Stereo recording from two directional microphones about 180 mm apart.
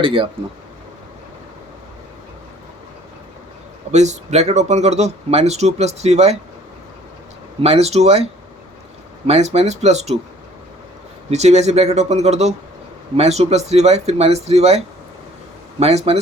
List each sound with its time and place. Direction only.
0.0 s speech: 30° right (ahead or behind)
3.9 s speech: 40° right (ahead or behind)
7.6 s speech: 35° right (ahead or behind)
11.3 s speech: 40° right (ahead or behind)